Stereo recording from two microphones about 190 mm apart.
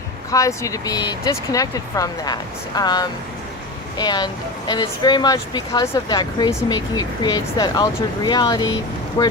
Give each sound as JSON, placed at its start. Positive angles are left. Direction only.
{"t": 0.3, "sound": "speech", "side_deg": 15}